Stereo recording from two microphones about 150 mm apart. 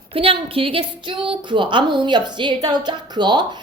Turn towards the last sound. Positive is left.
turn(degrees=-30)  # may be behind; listen again after turning